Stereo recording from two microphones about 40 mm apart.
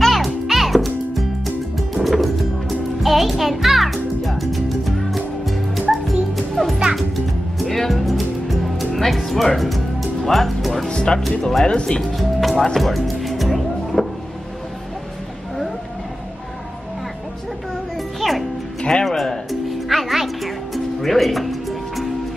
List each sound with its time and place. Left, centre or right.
0.0 s music: centre
10.9 s music: centre
11.2 s speech: centre
11.6 s speech: left
12.0 s speech: centre
12.7 s music: centre
18.2 s music: centre
18.8 s music: left
19.0 s music: centre